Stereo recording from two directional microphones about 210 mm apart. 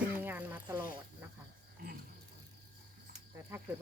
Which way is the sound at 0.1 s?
10° right (ahead or behind).